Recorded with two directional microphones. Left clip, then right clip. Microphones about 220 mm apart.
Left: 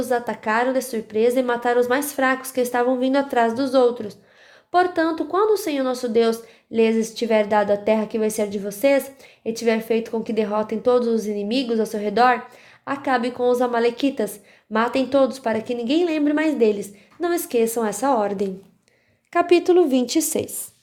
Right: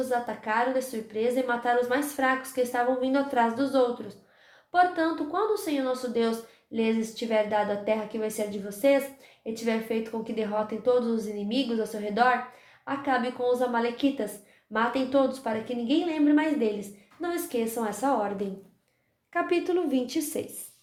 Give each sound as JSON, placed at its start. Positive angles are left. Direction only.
{"t": 0.1, "sound": "a woman's voice", "side_deg": 50}